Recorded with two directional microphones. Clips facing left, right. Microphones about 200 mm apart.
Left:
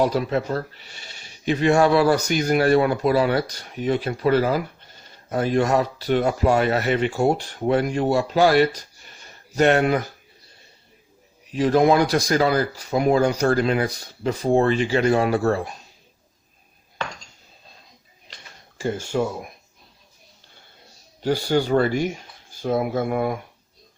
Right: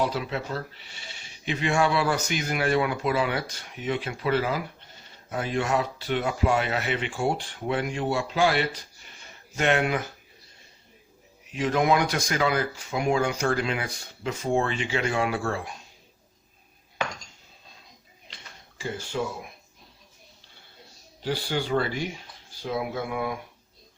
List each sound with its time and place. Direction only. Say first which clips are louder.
0.0 s speech: left 7 dB; 45° left (ahead or behind)
11.5 s speech: left 6 dB; 35° left (ahead or behind)
19.1 s speech: left 6 dB; 50° left (ahead or behind)
21.2 s speech: left 7 dB; 45° left (ahead or behind)